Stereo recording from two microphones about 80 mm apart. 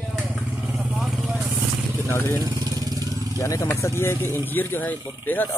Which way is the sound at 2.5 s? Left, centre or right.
Right.